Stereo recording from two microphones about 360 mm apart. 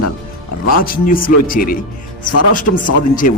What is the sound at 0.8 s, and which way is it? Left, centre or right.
Speech, left.